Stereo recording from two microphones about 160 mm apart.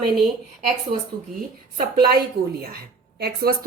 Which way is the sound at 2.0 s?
75° right (ahead or behind).